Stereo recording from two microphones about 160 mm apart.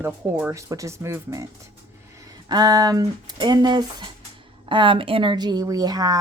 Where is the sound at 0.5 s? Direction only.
20° right (ahead or behind).